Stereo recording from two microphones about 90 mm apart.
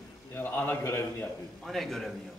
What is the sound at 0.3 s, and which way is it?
A man's voice, 25° left (ahead or behind).